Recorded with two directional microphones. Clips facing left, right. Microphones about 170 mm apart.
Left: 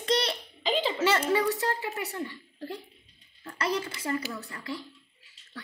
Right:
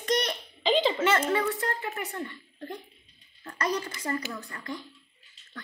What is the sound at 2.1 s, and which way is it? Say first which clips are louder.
Speech: left 1 dB; 15° left (ahead or behind).